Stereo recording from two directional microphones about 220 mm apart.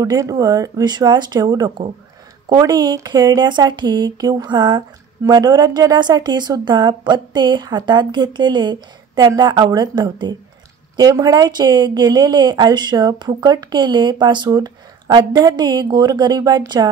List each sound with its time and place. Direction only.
0.0 s speech: 15° right (ahead or behind)